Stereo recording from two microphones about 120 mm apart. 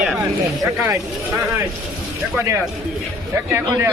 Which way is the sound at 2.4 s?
25° right (ahead or behind).